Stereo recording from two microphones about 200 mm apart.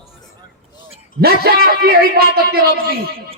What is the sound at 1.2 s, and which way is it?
A man's voice, 50° right (ahead or behind).